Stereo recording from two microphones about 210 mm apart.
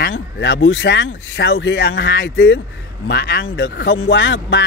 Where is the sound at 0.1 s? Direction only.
65° left (ahead or behind).